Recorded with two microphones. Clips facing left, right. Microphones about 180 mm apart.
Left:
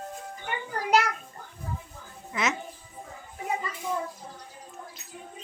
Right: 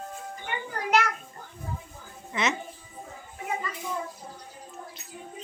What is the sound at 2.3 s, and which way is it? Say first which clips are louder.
Speech: right 1 dB; centre (ahead or behind).